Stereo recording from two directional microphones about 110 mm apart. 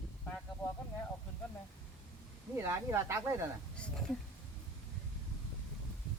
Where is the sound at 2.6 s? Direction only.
25° right (ahead or behind).